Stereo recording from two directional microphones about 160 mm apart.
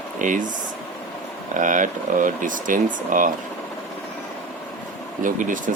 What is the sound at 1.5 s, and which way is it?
Speech, 55° right (ahead or behind).